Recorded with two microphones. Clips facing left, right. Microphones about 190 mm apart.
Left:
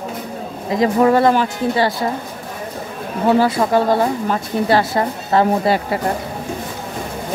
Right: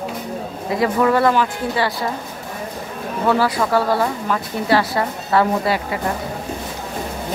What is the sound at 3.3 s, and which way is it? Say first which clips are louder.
Speech: left 3 dB; 25° left (ahead or behind).